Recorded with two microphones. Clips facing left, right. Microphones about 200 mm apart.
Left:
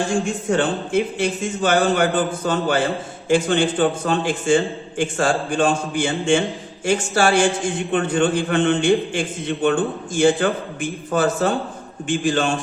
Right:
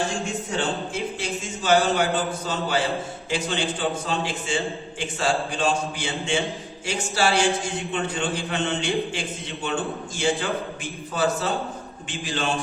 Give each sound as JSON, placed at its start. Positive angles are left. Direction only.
{"t": 0.5, "sound": "a man's voice", "side_deg": 55}